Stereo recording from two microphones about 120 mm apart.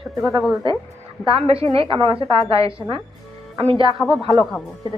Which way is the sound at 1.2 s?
55° right (ahead or behind).